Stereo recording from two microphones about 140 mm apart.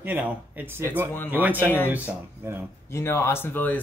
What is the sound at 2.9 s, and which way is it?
Speech, 20° left (ahead or behind).